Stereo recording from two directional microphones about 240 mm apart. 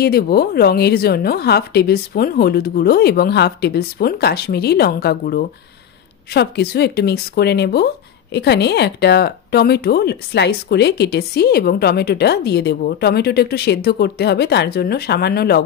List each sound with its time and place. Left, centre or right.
0.0 s speech: left